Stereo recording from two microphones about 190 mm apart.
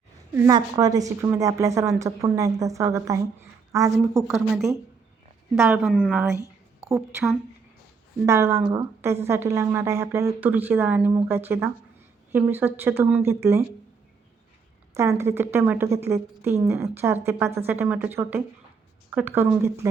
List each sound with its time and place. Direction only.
0.3 s a woman's voice: 15° right (ahead or behind)
5.5 s a woman's voice: 10° right (ahead or behind)
14.9 s a woman's voice: 15° right (ahead or behind)